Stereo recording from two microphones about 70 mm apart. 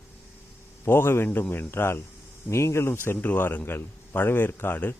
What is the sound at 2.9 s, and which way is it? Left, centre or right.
A man's voice, left.